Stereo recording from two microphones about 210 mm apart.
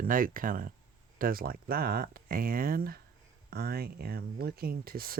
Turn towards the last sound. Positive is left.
turn(degrees=-45)  # may be behind; listen again after turning